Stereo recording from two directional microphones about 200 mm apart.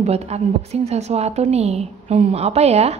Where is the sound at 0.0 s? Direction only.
30° right (ahead or behind).